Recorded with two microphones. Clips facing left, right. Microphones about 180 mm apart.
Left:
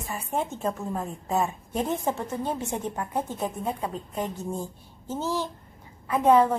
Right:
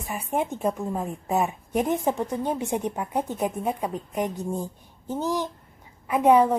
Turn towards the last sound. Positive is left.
turn(degrees=-15)  # may be behind; listen again after turning